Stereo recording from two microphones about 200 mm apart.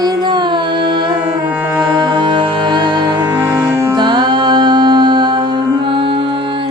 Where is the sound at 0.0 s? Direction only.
20° right (ahead or behind).